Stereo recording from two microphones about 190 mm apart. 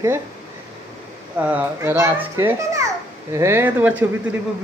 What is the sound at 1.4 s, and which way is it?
A child's voice, 10° right (ahead or behind).